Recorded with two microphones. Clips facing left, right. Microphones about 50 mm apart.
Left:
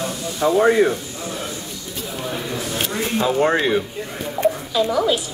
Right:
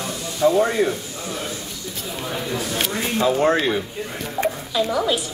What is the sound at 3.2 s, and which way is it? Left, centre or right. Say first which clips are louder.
Speech: even; left.